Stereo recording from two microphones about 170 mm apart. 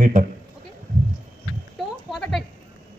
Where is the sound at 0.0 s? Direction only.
55° right (ahead or behind).